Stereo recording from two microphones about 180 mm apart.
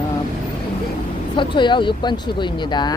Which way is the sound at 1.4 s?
25° left (ahead or behind).